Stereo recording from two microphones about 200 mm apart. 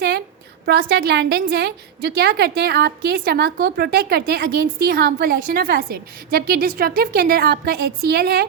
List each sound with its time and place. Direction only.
0.6 s a woman's voice: 50° right (ahead or behind)